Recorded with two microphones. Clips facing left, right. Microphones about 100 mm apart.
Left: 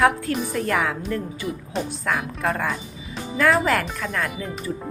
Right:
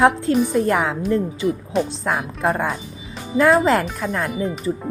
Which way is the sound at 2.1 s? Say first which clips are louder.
Right 3 dB; 25° right (ahead or behind).